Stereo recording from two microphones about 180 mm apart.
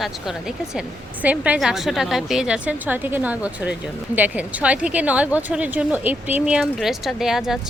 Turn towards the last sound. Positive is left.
turn(degrees=0)  # may be behind; listen again after turning